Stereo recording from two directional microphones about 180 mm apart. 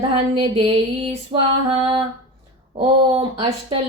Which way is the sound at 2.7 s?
30° right (ahead or behind).